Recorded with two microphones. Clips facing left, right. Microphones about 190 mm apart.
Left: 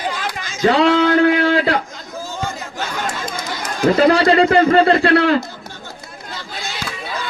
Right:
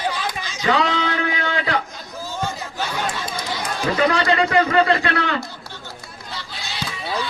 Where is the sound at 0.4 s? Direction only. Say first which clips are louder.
Left 12 dB; 50° left (ahead or behind).